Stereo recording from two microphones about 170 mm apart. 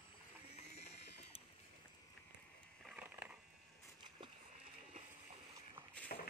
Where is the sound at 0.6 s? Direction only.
40° left (ahead or behind).